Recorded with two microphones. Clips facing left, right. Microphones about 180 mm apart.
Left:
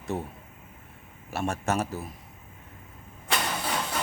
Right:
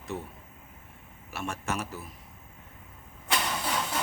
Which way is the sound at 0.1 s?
50° left (ahead or behind).